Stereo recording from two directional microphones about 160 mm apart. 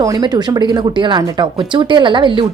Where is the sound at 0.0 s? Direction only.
25° right (ahead or behind).